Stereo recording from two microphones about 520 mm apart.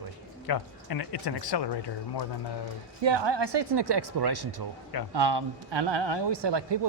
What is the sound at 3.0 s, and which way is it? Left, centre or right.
Speech, right.